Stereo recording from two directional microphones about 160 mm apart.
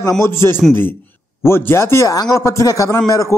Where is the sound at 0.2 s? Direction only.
15° left (ahead or behind).